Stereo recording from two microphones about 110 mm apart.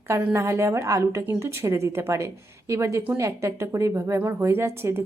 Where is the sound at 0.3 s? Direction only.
25° right (ahead or behind).